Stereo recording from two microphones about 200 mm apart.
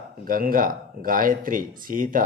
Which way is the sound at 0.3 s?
45° right (ahead or behind).